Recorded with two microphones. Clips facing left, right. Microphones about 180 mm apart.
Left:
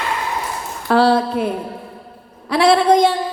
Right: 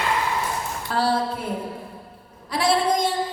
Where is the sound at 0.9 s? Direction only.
75° left (ahead or behind).